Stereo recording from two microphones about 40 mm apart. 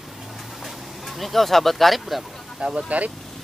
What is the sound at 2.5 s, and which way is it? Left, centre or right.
Speech, right.